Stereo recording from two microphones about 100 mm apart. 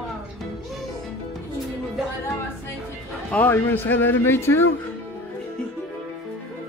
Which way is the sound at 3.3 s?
20° left (ahead or behind).